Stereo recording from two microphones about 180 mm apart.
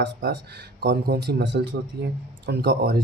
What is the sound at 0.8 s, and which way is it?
Speech, 60° right (ahead or behind).